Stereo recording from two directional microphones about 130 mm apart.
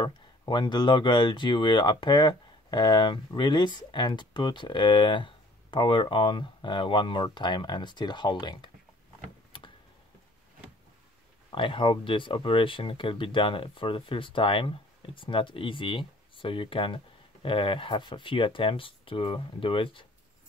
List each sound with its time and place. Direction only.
0.0 s speech: 35° left (ahead or behind)
9.5 s tick-tock: 40° left (ahead or behind)
11.5 s speech: 40° left (ahead or behind)